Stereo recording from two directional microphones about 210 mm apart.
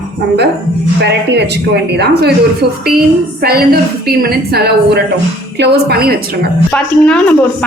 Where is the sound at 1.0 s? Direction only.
55° right (ahead or behind).